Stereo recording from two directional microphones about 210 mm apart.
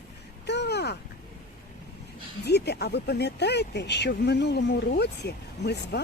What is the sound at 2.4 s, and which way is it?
Speech, 50° left (ahead or behind).